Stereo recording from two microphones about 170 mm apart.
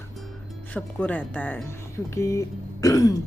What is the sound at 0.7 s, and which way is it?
Speech, 10° left (ahead or behind).